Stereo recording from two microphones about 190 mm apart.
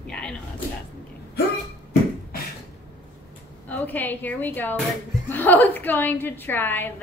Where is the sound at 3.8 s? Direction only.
10° left (ahead or behind).